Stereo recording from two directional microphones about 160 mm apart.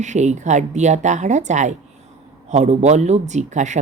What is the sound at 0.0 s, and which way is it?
Speech, 45° right (ahead or behind).